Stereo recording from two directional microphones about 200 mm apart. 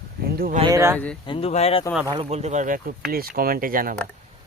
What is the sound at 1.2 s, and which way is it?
Speech, 25° left (ahead or behind).